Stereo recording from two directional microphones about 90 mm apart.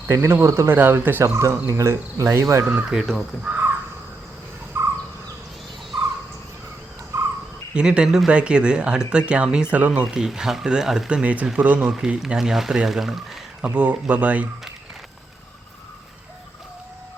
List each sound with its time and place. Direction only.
0.1 s cricket: 30° right (ahead or behind)
1.4 s speech: 35° right (ahead or behind)
2.9 s speech: centre (ahead or behind)
3.4 s crow: 20° right (ahead or behind)
4.7 s bird: 30° right (ahead or behind)
7.1 s cricket: 35° right (ahead or behind)
7.7 s speech: 10° right (ahead or behind)
13.6 s speech: 15° right (ahead or behind)